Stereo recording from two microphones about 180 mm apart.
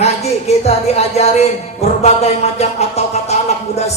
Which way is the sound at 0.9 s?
35° left (ahead or behind).